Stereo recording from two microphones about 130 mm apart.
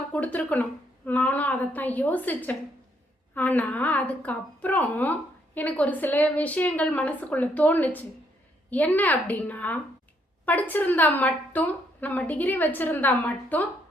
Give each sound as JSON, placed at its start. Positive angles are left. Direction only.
{"t": 0.1, "sound": "a woman's voice", "side_deg": 10}